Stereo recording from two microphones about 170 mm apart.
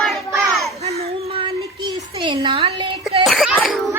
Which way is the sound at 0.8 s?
35° right (ahead or behind).